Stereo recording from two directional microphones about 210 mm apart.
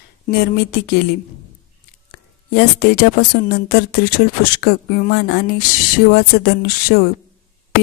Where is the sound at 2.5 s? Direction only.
45° left (ahead or behind).